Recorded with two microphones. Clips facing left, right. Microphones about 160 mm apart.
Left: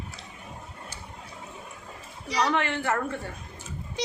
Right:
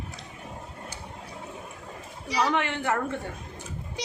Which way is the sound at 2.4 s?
15° right (ahead or behind).